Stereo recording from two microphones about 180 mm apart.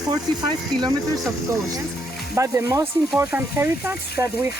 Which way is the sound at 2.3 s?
15° right (ahead or behind).